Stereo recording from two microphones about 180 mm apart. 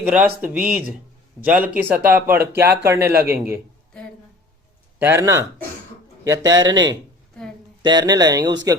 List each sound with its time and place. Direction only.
0.0 s speech: 10° right (ahead or behind)
4.9 s speech: 15° right (ahead or behind)